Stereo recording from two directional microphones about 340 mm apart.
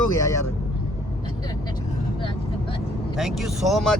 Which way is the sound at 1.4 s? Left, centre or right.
Centre.